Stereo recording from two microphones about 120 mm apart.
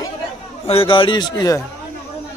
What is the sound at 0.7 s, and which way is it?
Speech, 45° left (ahead or behind).